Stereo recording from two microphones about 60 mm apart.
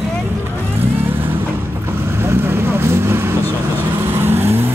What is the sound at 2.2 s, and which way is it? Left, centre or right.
Speech, right.